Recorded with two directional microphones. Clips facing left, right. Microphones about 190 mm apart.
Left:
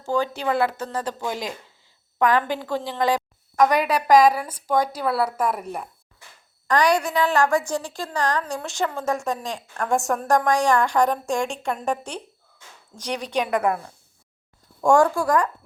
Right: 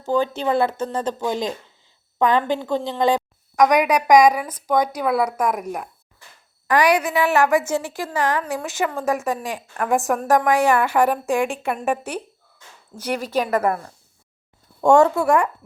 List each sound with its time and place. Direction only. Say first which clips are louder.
0.0 s a woman's voice: right 3 dB; 20° right (ahead or behind)
4.4 s a woman's voice: right 4 dB; 10° left (ahead or behind)
4.7 s a woman's voice: right 3 dB; 15° right (ahead or behind)
7.0 s a woman's voice: right 2 dB; 5° right (ahead or behind)
14.8 s speech: right 3 dB; 25° right (ahead or behind)